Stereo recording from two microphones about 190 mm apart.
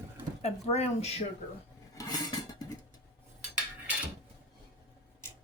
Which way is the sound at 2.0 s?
20° left (ahead or behind).